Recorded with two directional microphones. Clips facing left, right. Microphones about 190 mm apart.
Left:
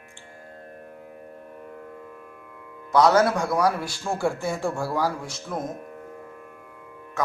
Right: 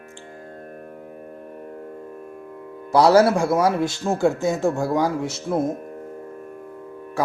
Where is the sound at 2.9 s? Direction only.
30° right (ahead or behind).